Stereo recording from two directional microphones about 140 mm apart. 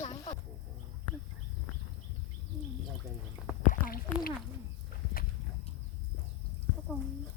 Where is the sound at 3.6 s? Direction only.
70° left (ahead or behind).